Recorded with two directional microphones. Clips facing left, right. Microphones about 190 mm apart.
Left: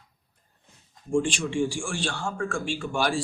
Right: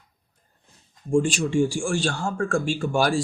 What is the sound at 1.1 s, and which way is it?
A man's voice, 40° right (ahead or behind).